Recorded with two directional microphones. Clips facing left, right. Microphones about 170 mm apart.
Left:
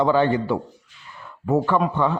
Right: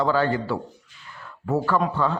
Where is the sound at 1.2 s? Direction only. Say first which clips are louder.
Left 3 dB; 15° left (ahead or behind).